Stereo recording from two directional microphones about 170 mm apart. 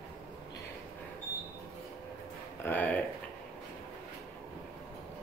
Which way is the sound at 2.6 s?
10° left (ahead or behind).